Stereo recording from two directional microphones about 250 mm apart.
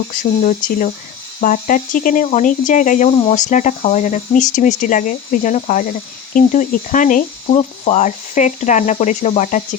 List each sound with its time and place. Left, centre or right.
0.2 s speech: left